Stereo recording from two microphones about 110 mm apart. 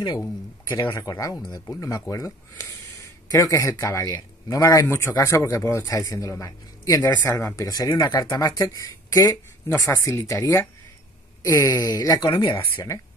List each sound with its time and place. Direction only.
0.9 s speech: 30° left (ahead or behind)
11.4 s speech: 30° left (ahead or behind)